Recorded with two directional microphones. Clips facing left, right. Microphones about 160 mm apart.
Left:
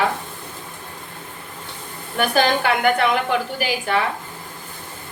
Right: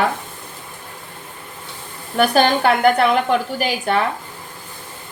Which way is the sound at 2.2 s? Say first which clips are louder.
Right 3 dB; 35° right (ahead or behind).